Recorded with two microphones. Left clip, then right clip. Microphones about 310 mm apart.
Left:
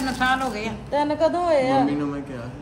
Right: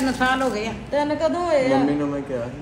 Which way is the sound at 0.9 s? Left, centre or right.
Left.